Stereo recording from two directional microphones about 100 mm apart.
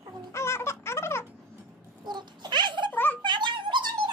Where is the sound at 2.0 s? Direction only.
50° right (ahead or behind).